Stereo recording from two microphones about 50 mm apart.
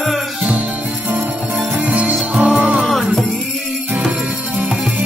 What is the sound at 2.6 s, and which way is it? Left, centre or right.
Music, right.